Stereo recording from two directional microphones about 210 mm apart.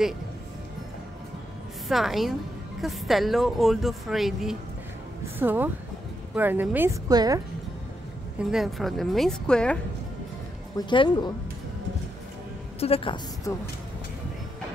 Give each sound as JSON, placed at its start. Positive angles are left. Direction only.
{"t": 1.9, "sound": "a woman's voice", "side_deg": 0}
{"t": 8.4, "sound": "speech", "side_deg": 0}
{"t": 10.9, "sound": "a woman's voice", "side_deg": 20}
{"t": 12.8, "sound": "a woman's voice", "side_deg": 25}